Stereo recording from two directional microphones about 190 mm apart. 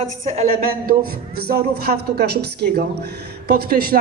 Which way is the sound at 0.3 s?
45° right (ahead or behind).